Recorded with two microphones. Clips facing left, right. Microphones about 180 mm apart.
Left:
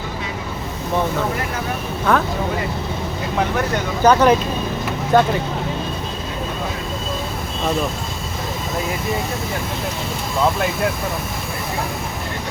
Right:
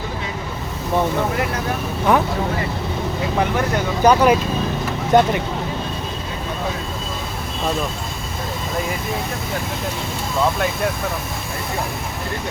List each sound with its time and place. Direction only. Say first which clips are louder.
2.1 s speech: right 1 dB; 15° right (ahead or behind)
4.0 s speech: left 1 dB; 10° right (ahead or behind)